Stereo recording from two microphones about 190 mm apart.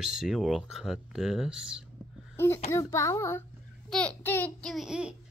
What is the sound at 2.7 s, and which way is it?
Child singing, 15° left (ahead or behind).